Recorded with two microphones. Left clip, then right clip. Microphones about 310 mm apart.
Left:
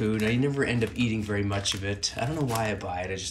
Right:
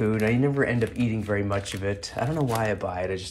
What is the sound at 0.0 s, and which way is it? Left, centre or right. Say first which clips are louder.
Speech: right 3 dB; centre.